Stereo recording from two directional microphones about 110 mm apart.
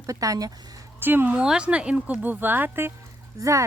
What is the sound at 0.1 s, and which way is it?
Speech, 30° right (ahead or behind).